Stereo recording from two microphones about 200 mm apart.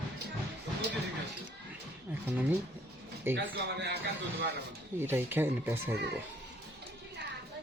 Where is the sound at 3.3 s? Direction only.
60° right (ahead or behind).